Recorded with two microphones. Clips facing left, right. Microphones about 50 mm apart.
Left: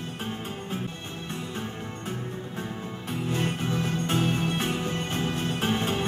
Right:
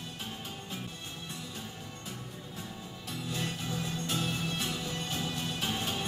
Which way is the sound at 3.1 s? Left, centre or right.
Left.